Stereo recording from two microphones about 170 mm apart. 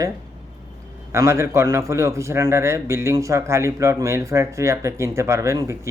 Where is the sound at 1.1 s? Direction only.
15° right (ahead or behind).